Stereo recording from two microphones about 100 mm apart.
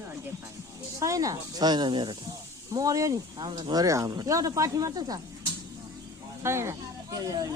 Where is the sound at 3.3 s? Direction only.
60° right (ahead or behind).